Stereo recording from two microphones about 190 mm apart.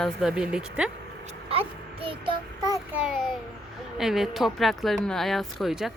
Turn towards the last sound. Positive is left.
turn(degrees=0)  # may be behind; listen again after turning